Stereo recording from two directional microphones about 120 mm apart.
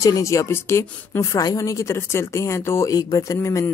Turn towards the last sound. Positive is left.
turn(degrees=25)  # may be behind; listen again after turning